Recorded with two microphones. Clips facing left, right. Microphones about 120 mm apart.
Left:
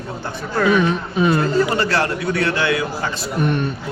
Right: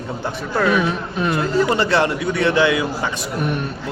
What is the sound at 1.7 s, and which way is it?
A man's voice, 20° right (ahead or behind).